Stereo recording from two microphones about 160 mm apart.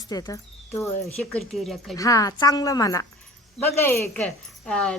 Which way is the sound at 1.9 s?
20° left (ahead or behind).